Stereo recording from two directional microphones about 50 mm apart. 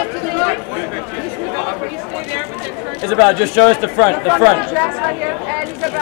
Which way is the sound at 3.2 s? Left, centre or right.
Centre.